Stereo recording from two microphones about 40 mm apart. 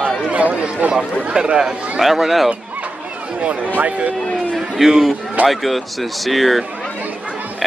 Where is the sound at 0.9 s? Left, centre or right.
Right.